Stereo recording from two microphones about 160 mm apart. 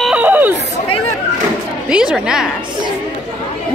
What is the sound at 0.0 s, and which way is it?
Chatter, 10° right (ahead or behind).